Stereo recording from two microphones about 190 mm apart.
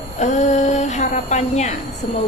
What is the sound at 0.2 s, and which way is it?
A woman's voice, 40° left (ahead or behind).